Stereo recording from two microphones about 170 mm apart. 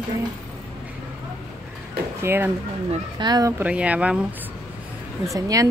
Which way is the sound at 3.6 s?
10° right (ahead or behind).